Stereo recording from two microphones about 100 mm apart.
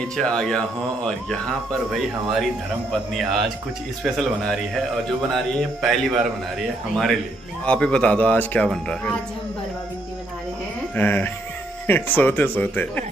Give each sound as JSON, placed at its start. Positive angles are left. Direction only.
{"t": 0.1, "sound": "speech", "side_deg": 5}
{"t": 11.0, "sound": "speech", "side_deg": 20}